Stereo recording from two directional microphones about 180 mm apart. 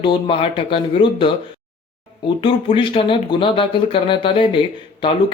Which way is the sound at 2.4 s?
30° left (ahead or behind).